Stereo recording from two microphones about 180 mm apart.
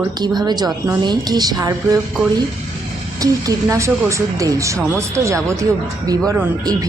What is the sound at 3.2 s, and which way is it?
A woman's voice, 20° right (ahead or behind).